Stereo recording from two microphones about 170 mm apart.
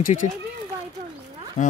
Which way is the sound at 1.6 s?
35° left (ahead or behind).